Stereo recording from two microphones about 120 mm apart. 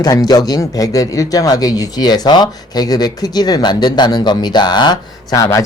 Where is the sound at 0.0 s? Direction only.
35° left (ahead or behind).